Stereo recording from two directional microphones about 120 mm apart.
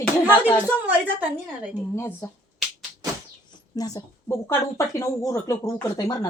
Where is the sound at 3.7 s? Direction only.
30° left (ahead or behind).